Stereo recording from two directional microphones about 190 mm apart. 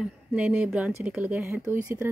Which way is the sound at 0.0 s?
5° right (ahead or behind).